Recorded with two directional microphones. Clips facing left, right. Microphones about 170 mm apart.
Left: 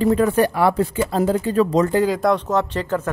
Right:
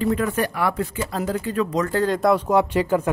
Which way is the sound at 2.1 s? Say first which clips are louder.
Right 1 dB; 5° right (ahead or behind).